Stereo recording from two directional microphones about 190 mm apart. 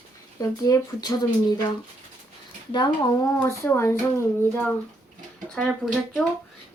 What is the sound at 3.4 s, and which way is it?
Speech, 10° left (ahead or behind).